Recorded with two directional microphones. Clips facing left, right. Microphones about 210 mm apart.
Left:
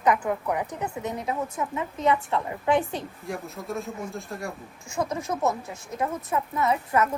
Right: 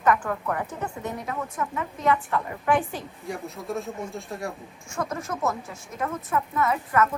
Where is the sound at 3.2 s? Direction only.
Centre (ahead or behind).